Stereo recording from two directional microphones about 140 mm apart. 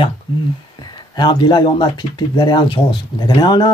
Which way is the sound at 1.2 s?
30° left (ahead or behind).